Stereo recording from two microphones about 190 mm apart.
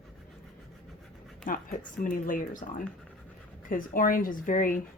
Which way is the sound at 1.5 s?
45° left (ahead or behind).